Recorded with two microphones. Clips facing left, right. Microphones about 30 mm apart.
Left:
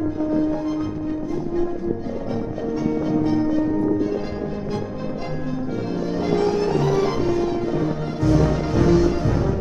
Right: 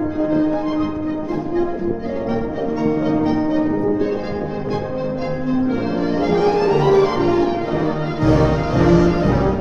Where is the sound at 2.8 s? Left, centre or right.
Right.